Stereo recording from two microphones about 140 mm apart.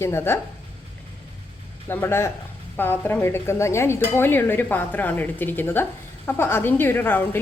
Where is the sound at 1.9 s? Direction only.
15° left (ahead or behind).